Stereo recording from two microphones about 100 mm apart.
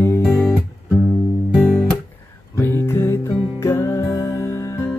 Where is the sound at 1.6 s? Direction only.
15° left (ahead or behind).